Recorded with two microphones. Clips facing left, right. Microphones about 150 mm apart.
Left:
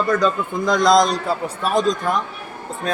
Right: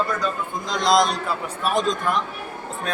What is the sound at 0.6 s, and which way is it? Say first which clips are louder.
Speech: left 4 dB; 50° left (ahead or behind).